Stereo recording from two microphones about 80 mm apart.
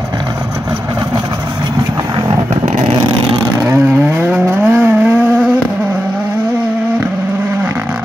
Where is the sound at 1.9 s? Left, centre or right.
Right.